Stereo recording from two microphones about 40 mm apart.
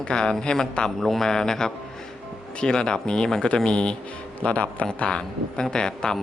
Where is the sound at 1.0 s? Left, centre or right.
Centre.